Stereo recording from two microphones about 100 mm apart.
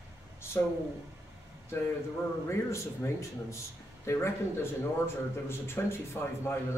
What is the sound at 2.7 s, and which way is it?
A man's voice, 30° left (ahead or behind).